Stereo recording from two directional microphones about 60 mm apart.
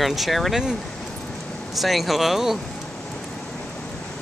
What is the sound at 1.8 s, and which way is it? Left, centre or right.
Speech, centre.